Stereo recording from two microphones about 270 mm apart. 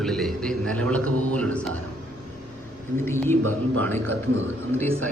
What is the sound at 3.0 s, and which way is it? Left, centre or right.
Speech, centre.